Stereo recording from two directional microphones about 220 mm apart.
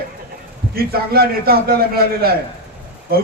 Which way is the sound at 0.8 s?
45° right (ahead or behind).